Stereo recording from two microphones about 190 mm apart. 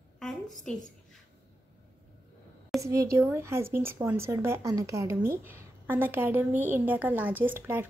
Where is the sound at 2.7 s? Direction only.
15° right (ahead or behind).